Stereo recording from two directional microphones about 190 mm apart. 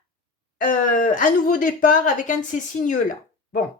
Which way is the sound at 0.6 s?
45° left (ahead or behind).